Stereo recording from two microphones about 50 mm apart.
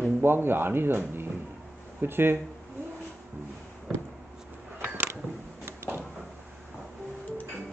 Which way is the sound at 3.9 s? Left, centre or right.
Centre.